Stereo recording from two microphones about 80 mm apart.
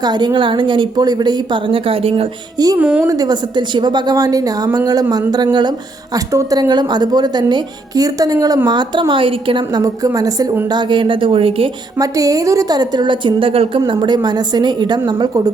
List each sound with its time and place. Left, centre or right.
0.0 s a woman's voice: right
2.7 s a woman's voice: centre
3.1 s a woman's voice: right
5.3 s a woman's voice: right
6.1 s a woman's voice: right
8.7 s a woman's voice: right
9.8 s a woman's voice: right
10.7 s a woman's voice: right
11.9 s a woman's voice: right